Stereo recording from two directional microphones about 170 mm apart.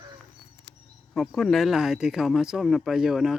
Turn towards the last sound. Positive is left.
turn(degrees=0)  # may be behind; listen again after turning